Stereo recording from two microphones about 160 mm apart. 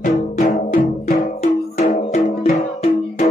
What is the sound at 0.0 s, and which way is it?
Music, 50° left (ahead or behind).